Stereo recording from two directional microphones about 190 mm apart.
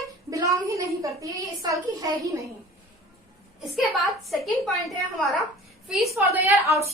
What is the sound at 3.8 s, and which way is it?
A woman's voice, centre (ahead or behind).